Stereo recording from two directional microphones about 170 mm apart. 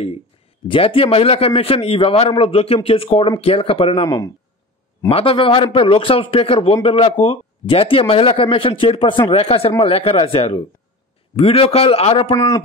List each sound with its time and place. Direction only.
0.7 s a man's voice: 30° left (ahead or behind)
5.1 s a man's voice: 35° left (ahead or behind)
12.3 s a man's voice: 20° left (ahead or behind)